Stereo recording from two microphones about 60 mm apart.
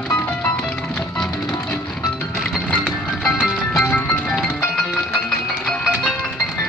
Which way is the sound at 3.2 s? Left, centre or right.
Centre.